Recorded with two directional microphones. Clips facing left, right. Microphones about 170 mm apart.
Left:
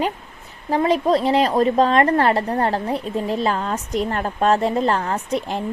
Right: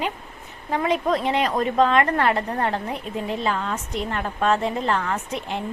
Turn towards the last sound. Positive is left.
turn(degrees=35)  # may be behind; listen again after turning